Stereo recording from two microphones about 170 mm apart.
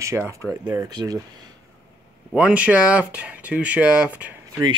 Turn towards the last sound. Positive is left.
turn(degrees=-20)  # may be behind; listen again after turning